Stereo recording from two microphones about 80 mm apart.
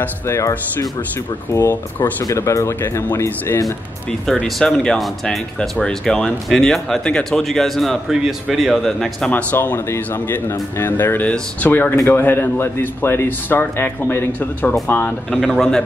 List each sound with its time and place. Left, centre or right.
0.3 s speech: left
1.7 s a man's voice: left
2.2 s speech: left
4.3 s speech: centre
9.3 s a man's voice: left
15.5 s speech: centre